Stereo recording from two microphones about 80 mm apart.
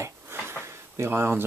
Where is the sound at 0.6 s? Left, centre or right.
Right.